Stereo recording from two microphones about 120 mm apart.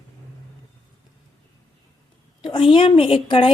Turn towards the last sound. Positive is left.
turn(degrees=45)  # may be behind; listen again after turning